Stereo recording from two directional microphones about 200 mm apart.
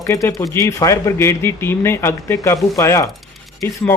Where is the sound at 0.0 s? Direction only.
15° left (ahead or behind).